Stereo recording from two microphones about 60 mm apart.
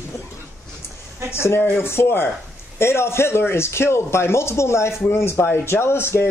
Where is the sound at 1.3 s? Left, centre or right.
Left.